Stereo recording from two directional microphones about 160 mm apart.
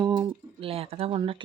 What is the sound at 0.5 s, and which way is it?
Speech, 35° right (ahead or behind).